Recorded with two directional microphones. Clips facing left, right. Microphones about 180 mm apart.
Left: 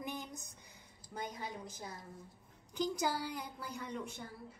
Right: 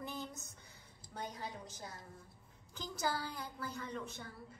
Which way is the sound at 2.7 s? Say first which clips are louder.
Left 4 dB; 15° left (ahead or behind).